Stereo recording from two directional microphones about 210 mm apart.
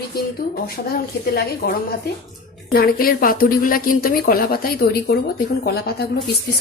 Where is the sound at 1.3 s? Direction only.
45° left (ahead or behind).